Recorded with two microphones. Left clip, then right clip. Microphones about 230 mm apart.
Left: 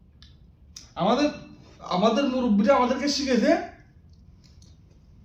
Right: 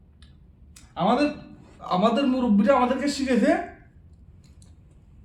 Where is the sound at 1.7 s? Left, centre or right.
Centre.